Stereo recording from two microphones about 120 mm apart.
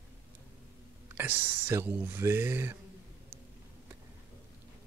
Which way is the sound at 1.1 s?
15° right (ahead or behind).